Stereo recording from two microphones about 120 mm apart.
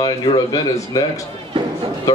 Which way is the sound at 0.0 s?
35° left (ahead or behind).